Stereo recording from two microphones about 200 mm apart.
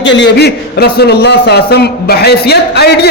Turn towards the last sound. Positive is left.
turn(degrees=55)  # may be behind; listen again after turning